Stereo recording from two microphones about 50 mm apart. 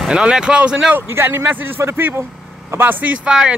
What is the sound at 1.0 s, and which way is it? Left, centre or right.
Speech, right.